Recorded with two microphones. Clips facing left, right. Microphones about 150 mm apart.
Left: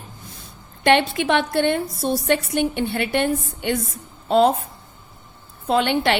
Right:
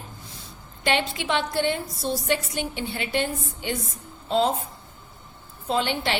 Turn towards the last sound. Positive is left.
turn(degrees=60)  # may be behind; listen again after turning